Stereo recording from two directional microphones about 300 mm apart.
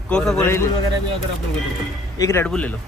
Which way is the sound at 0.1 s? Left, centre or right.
Centre.